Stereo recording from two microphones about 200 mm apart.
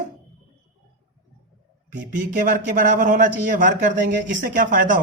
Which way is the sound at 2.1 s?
40° right (ahead or behind).